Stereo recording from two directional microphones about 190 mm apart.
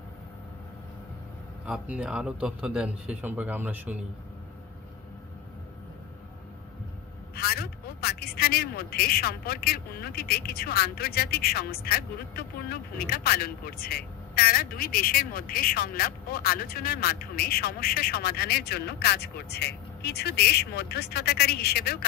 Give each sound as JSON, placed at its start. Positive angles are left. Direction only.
{"t": 1.7, "sound": "a man's voice", "side_deg": -5}
{"t": 7.3, "sound": "a man's voice", "side_deg": 55}